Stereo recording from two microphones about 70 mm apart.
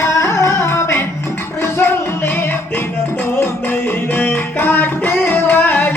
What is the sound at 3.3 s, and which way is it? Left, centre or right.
Music, left.